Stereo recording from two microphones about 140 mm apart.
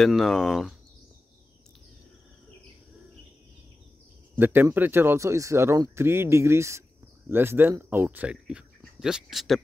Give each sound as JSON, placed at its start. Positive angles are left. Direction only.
{"t": 0.0, "sound": "speech", "side_deg": 0}
{"t": 4.4, "sound": "speech", "side_deg": -15}